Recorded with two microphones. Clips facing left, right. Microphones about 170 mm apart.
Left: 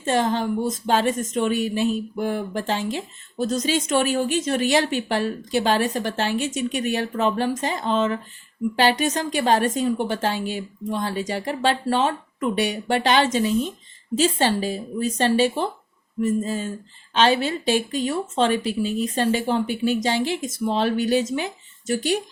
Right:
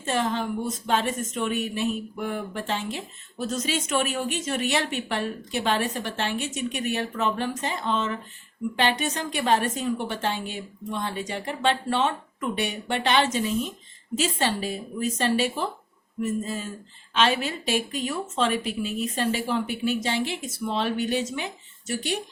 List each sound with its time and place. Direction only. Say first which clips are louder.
0.0 s a woman's voice: left 5 dB; 35° left (ahead or behind)